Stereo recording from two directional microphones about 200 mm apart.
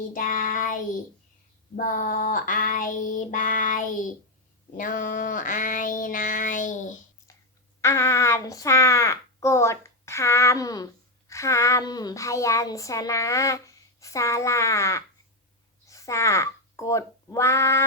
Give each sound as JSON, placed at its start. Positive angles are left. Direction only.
{"t": 0.1, "sound": "child singing", "side_deg": 40}
{"t": 7.8, "sound": "a child's voice", "side_deg": 15}